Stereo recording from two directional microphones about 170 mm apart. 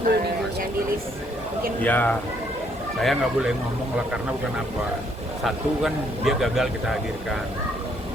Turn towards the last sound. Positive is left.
turn(degrees=0)  # may be behind; listen again after turning